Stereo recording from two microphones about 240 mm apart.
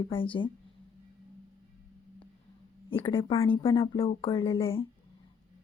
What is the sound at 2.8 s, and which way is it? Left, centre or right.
A woman's voice, left.